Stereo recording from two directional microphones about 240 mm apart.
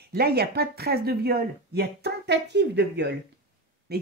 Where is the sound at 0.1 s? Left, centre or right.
Right.